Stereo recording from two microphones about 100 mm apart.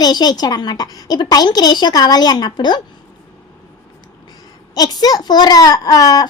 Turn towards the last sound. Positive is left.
turn(degrees=40)  # may be behind; listen again after turning